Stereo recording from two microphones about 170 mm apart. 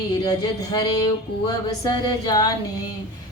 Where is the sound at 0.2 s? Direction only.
25° left (ahead or behind).